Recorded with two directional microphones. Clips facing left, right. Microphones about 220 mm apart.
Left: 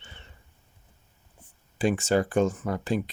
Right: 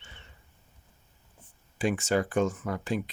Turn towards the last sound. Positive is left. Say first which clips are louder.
# left 3 dB
turn(degrees=35)  # may be behind; listen again after turning